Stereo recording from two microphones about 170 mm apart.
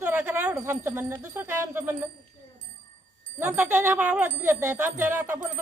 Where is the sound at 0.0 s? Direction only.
10° right (ahead or behind).